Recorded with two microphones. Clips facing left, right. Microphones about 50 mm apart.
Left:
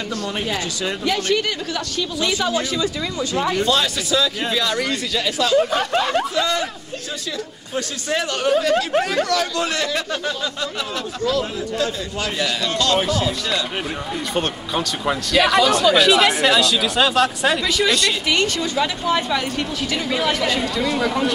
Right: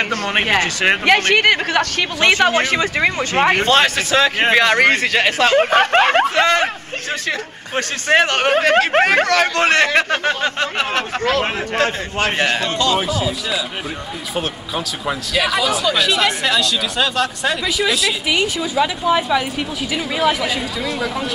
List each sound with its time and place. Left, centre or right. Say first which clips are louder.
0.1 s speech: right 7 dB; right
12.9 s speech: even; centre